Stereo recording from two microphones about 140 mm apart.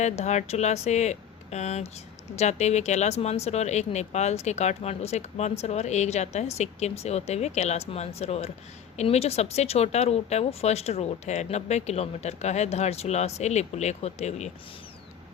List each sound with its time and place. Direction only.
0.0 s speech: 55° left (ahead or behind)